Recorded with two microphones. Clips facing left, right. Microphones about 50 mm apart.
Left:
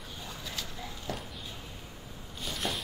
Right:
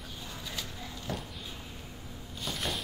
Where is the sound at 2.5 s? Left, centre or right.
Centre.